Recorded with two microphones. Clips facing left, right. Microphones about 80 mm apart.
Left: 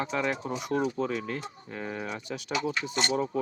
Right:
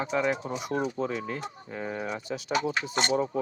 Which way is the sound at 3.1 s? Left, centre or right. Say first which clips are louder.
Right 3 dB; centre.